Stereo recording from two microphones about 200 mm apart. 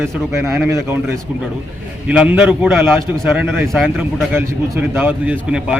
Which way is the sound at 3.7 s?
Centre (ahead or behind).